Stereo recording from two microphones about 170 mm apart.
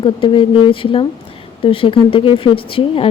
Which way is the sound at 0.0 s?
30° left (ahead or behind).